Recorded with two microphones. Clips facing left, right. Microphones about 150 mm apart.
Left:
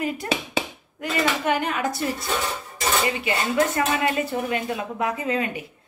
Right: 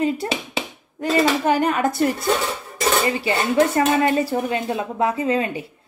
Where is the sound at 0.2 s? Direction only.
25° right (ahead or behind); by 2.2 s 55° right (ahead or behind).